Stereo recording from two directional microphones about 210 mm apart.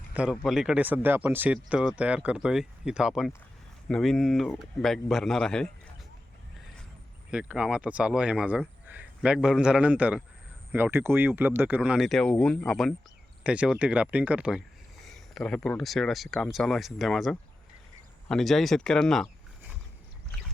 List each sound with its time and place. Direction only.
0.1 s speech: 5° right (ahead or behind)
7.3 s speech: 5° right (ahead or behind)